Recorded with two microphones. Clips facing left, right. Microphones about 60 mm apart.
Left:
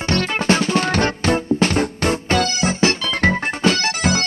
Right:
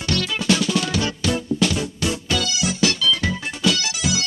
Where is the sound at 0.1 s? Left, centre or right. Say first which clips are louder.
Left 3 dB; left.